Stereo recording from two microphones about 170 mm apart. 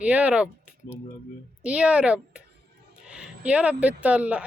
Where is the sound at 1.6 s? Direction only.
5° right (ahead or behind).